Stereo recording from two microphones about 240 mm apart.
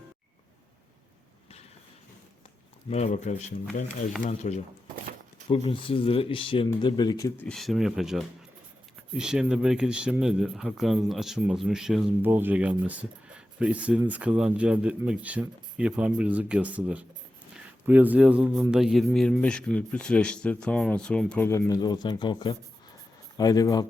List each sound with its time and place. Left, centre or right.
2.9 s speech: left